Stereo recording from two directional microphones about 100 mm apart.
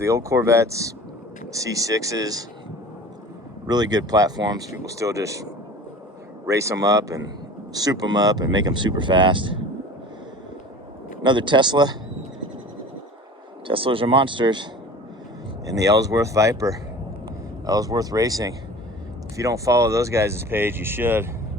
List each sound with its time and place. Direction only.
0.0 s speech: 30° right (ahead or behind)
3.7 s speech: 45° right (ahead or behind)
11.2 s speech: 50° right (ahead or behind)
13.7 s speech: 60° right (ahead or behind)
15.6 s speech: 35° right (ahead or behind)